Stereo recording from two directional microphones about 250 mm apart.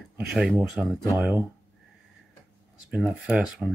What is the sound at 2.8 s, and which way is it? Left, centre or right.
Speech, centre.